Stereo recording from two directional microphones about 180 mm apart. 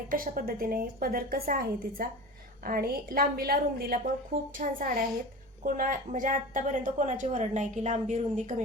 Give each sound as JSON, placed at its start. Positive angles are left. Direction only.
{"t": 0.1, "sound": "a woman's voice", "side_deg": -50}